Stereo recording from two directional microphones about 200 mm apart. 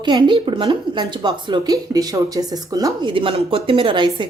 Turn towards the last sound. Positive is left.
turn(degrees=-25)  # may be behind; listen again after turning